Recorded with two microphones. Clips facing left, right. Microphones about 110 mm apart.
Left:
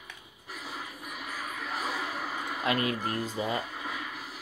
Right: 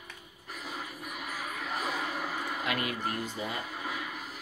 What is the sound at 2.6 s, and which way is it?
Speech, 30° left (ahead or behind).